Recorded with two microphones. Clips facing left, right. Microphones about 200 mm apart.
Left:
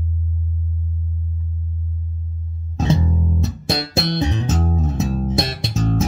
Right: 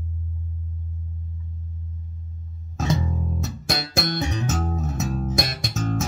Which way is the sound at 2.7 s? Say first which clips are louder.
Left 5 dB; 30° left (ahead or behind).